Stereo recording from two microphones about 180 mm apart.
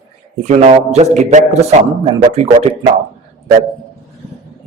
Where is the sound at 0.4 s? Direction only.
40° right (ahead or behind).